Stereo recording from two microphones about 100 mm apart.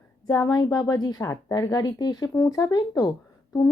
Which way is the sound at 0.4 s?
45° left (ahead or behind).